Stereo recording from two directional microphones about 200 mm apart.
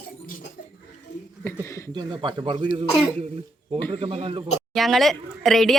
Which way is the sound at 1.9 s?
20° right (ahead or behind).